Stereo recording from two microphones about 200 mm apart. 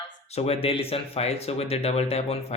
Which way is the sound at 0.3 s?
30° left (ahead or behind).